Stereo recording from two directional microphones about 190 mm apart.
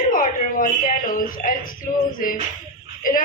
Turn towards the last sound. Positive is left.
turn(degrees=45)  # may be behind; listen again after turning